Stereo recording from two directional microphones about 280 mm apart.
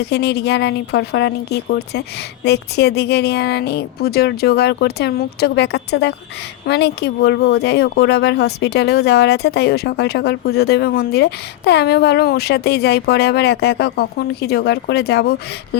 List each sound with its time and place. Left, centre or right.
0.0 s speech: left